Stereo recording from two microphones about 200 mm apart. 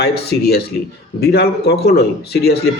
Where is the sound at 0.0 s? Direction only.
50° left (ahead or behind).